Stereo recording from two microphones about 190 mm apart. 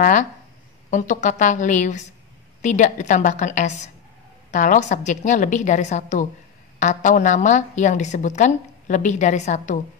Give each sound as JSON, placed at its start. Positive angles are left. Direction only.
{"t": 0.0, "sound": "a woman's voice", "side_deg": 40}